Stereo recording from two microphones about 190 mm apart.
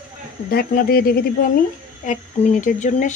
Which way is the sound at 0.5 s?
55° left (ahead or behind).